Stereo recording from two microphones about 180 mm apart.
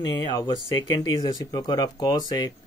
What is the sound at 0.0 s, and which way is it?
Speech, 20° left (ahead or behind).